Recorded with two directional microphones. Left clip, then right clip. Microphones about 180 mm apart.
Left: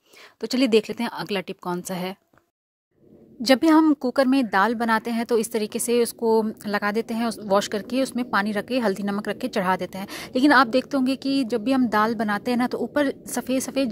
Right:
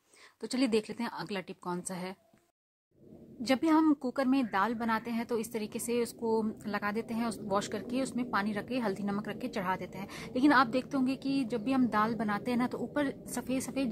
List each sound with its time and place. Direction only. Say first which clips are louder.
0.4 s a woman's voice: left 11 dB; 35° left (ahead or behind)
3.4 s a woman's voice: left 10 dB; 45° left (ahead or behind)